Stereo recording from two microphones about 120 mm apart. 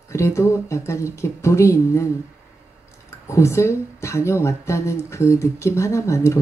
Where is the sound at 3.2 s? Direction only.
25° left (ahead or behind).